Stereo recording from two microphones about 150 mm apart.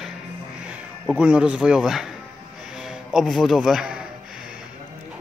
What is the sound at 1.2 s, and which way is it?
Speech, 10° right (ahead or behind).